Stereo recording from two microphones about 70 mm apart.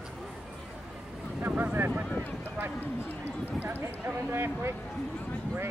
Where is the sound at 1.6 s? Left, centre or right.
Right.